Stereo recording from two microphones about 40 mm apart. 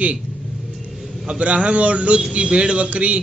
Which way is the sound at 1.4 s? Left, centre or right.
Right.